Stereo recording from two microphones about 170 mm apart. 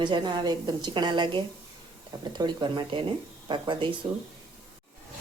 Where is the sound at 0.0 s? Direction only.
25° right (ahead or behind).